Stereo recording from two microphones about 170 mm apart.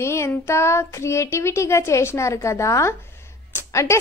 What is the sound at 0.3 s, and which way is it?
Speech, 15° left (ahead or behind).